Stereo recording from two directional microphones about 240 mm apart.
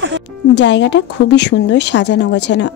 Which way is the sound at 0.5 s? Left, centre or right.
Left.